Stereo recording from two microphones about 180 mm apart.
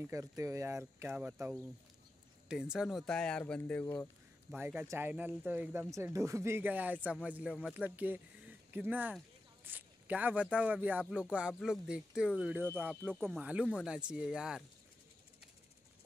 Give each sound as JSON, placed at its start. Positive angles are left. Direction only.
{"t": 0.1, "sound": "speech", "side_deg": -15}
{"t": 4.5, "sound": "speech", "side_deg": -10}
{"t": 12.9, "sound": "speech", "side_deg": 5}
{"t": 13.4, "sound": "speech", "side_deg": -5}